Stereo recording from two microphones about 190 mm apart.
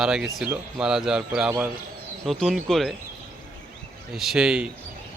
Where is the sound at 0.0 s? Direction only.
5° right (ahead or behind).